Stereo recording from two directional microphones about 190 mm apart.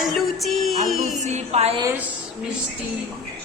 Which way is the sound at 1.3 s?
35° right (ahead or behind).